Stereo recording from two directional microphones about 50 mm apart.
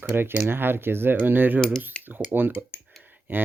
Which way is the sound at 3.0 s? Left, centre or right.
Right.